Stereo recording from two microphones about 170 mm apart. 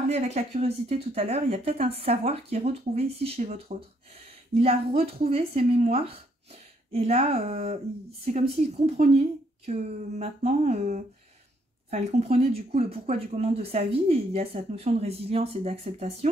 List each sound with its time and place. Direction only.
0.1 s speech: 40° right (ahead or behind)
9.7 s a sound: 40° right (ahead or behind)
11.9 s speech: 40° right (ahead or behind)